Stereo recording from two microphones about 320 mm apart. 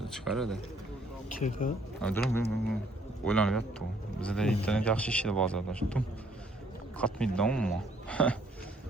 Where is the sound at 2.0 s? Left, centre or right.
Centre.